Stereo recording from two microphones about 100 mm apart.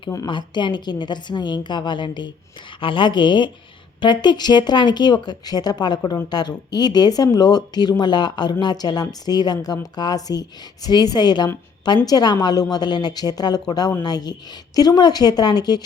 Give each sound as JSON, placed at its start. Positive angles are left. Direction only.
{"t": 0.3, "sound": "a woman's voice", "side_deg": 50}